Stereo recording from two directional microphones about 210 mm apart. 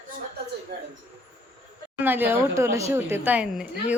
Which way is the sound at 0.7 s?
50° right (ahead or behind).